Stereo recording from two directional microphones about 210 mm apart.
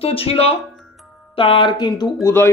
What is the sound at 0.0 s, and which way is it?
Speech, 25° left (ahead or behind).